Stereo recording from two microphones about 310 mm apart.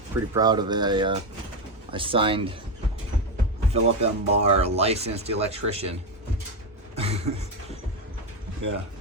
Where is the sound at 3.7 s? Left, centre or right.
Centre.